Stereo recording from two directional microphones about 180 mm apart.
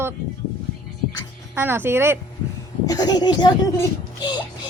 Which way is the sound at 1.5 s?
10° right (ahead or behind).